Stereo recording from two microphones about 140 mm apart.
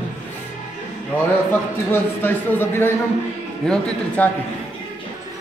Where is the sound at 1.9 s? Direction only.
15° left (ahead or behind).